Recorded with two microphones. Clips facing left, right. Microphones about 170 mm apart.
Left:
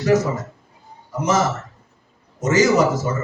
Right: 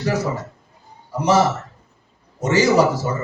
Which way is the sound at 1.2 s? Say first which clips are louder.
Right 3 dB; 35° right (ahead or behind).